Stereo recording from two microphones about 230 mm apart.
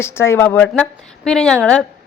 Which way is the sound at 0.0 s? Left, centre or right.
Centre.